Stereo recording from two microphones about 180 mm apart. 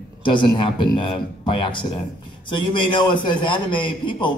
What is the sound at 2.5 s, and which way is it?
A man's voice, 25° left (ahead or behind).